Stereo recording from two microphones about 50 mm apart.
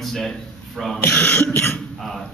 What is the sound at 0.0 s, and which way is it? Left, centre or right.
Speech, centre.